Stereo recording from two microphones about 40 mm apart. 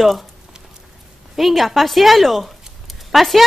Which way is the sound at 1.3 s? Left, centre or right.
Centre.